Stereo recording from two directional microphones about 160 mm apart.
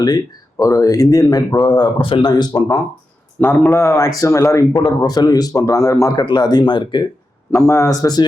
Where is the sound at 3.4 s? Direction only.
10° left (ahead or behind); by 7.1 s 30° left (ahead or behind).